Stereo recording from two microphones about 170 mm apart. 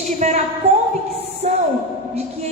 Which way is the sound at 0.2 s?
45° right (ahead or behind).